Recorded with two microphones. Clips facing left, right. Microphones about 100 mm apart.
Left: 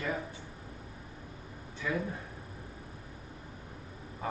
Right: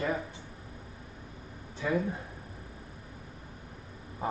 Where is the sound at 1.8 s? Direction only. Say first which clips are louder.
Right 4 dB; 30° right (ahead or behind).